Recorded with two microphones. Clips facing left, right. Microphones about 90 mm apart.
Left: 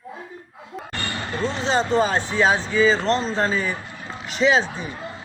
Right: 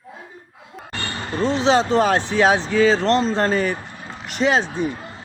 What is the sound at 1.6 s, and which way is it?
A man's voice, 75° right (ahead or behind).